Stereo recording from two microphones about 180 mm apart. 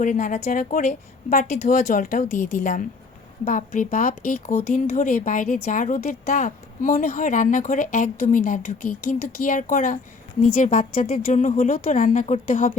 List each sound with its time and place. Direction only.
0.0 s a woman's voice: 40° left (ahead or behind)
10.8 s a woman's voice: 30° left (ahead or behind); by 12.7 s 50° left (ahead or behind)